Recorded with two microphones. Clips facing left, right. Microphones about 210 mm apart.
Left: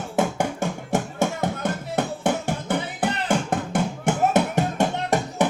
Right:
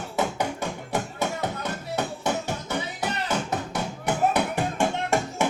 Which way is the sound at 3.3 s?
50° left (ahead or behind).